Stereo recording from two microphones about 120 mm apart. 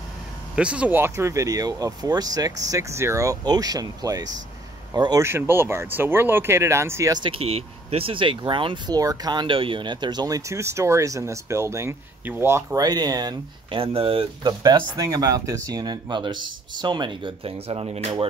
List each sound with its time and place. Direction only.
0.6 s speech: 10° right (ahead or behind)
7.2 s speech: 50° right (ahead or behind)
8.9 s speech: 30° right (ahead or behind)
12.8 s speech: 35° right (ahead or behind)
13.7 s speech: 50° right (ahead or behind)
14.6 s speech: 30° right (ahead or behind); by 18.1 s 60° right (ahead or behind)